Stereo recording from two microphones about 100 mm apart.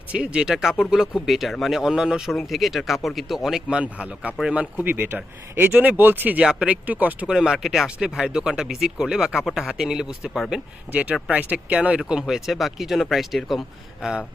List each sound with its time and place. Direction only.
0.1 s speech: 10° right (ahead or behind)